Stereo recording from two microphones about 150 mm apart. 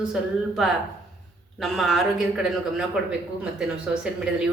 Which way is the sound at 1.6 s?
Centre (ahead or behind).